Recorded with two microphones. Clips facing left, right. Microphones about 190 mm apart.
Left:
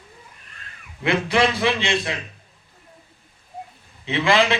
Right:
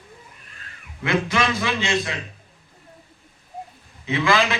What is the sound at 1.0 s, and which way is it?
A man's voice, 30° left (ahead or behind).